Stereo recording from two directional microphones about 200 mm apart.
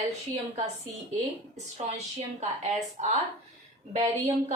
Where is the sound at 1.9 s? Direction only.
35° right (ahead or behind).